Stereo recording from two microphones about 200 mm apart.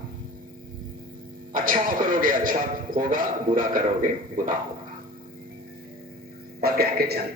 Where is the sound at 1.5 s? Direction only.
45° right (ahead or behind).